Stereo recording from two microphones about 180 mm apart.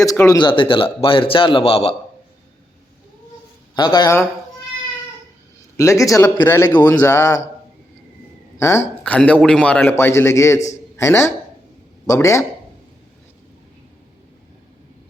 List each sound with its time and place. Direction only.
0.0 s a man's voice: 20° left (ahead or behind)
3.8 s a man's voice: 25° left (ahead or behind)
5.7 s a man's voice: 15° left (ahead or behind)
8.5 s a man's voice: 15° left (ahead or behind)